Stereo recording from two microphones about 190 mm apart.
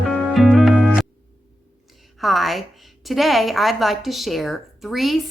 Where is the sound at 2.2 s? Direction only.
Centre (ahead or behind).